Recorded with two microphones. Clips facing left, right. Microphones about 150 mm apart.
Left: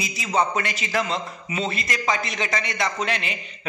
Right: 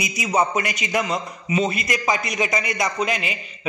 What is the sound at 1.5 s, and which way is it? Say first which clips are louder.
A man's voice: right 5 dB; 10° right (ahead or behind).